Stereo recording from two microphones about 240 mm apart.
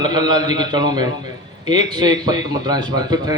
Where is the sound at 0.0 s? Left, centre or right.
Centre.